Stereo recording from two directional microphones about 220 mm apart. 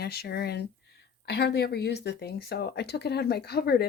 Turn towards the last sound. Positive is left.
turn(degrees=45)  # may be behind; listen again after turning